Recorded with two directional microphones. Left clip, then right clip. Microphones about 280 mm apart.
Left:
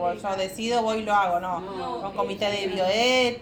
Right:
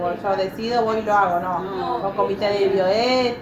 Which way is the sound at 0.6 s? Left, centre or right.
Left.